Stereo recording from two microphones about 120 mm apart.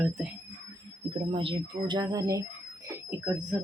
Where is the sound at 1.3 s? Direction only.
45° right (ahead or behind); by 2.4 s 30° right (ahead or behind).